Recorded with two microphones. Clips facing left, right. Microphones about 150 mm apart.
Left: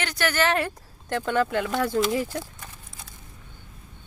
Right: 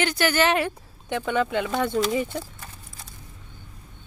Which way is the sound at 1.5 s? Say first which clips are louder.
Even; centre (ahead or behind).